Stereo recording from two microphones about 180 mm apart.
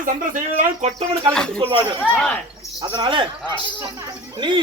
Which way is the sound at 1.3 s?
5° left (ahead or behind).